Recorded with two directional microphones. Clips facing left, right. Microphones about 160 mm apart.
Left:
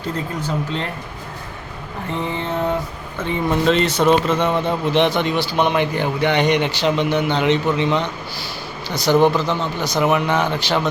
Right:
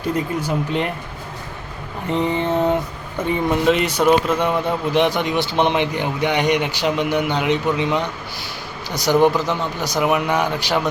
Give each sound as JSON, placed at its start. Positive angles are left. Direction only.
{"t": 0.4, "sound": "speech", "side_deg": -15}
{"t": 2.0, "sound": "speech", "side_deg": -15}